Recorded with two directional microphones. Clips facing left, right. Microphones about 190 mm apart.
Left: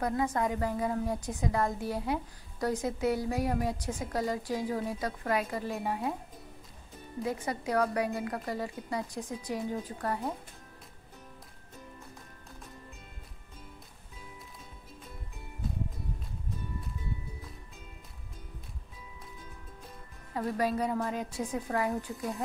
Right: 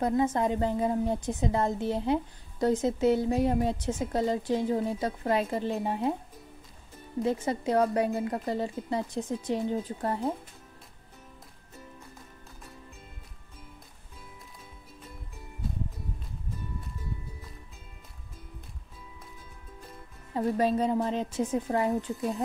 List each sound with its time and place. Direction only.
0.0 s a woman's voice: 25° right (ahead or behind)
7.2 s a woman's voice: 25° right (ahead or behind)
20.3 s a woman's voice: 25° right (ahead or behind)